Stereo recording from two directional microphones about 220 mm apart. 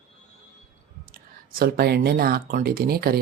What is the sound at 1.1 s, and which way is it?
Speech, 40° right (ahead or behind).